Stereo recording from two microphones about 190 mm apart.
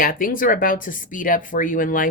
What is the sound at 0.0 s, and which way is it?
A woman's voice, 45° left (ahead or behind).